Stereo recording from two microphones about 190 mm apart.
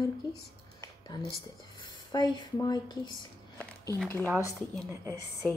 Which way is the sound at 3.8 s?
10° left (ahead or behind).